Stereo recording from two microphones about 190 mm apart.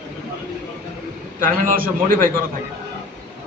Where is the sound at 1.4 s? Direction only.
45° right (ahead or behind).